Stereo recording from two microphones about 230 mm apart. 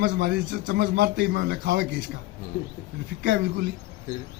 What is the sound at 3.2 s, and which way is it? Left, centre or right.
Speech, right.